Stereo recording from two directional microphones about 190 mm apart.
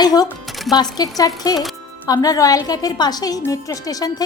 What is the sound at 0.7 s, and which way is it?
Speech, 20° left (ahead or behind).